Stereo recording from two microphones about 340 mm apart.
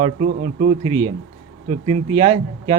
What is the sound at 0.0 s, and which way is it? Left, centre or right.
A man's voice, centre.